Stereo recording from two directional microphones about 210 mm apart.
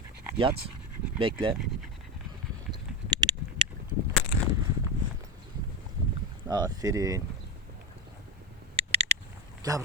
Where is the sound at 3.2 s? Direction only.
20° right (ahead or behind).